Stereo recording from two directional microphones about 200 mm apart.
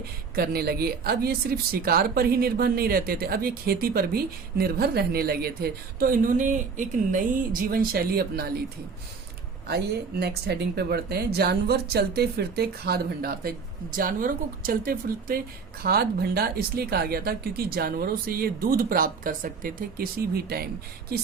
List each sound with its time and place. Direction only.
0.0 s speech: 50° right (ahead or behind)
9.6 s speech: 55° right (ahead or behind)